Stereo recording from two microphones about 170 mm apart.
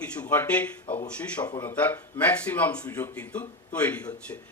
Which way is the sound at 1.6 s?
10° left (ahead or behind).